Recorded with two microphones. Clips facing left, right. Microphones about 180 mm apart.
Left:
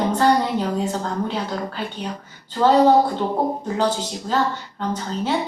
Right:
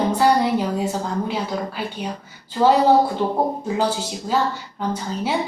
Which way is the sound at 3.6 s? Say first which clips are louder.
Even; 10° right (ahead or behind).